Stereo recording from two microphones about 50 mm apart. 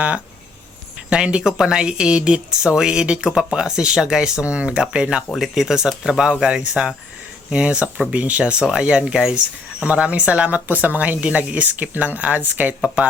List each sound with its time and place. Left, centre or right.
1.1 s speech: right
9.1 s speech: centre
9.8 s speech: right